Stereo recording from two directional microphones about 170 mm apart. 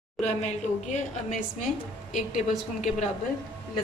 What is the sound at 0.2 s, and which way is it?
A woman's voice, 40° left (ahead or behind).